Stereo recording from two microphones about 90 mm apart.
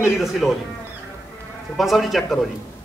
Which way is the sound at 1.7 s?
Centre (ahead or behind).